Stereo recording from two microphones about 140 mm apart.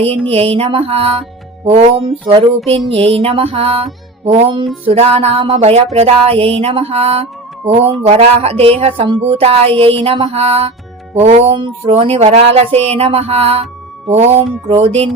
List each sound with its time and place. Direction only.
0.3 s music: 45° right (ahead or behind)
11.5 s music: 40° right (ahead or behind)